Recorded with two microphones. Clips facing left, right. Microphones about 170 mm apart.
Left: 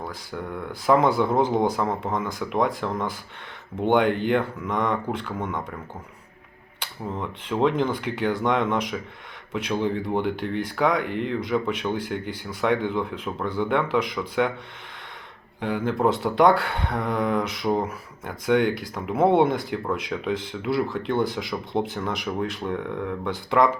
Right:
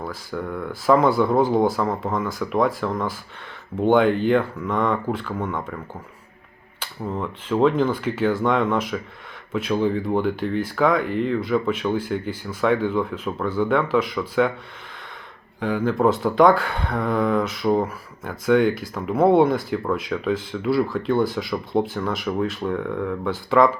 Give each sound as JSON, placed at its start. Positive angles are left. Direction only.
{"t": 0.1, "sound": "speech", "side_deg": 15}
{"t": 6.7, "sound": "speech", "side_deg": 15}
{"t": 15.6, "sound": "speech", "side_deg": 20}